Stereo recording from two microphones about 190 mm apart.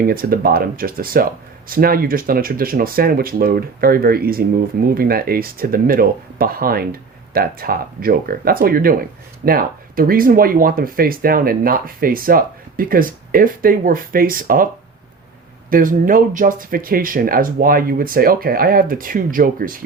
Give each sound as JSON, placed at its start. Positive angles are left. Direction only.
{"t": 0.0, "sound": "speech", "side_deg": -50}
{"t": 15.7, "sound": "speech", "side_deg": -45}